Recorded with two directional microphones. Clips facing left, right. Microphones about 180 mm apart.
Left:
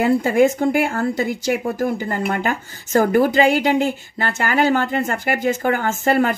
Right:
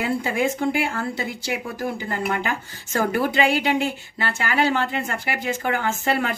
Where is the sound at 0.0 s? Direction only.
45° left (ahead or behind).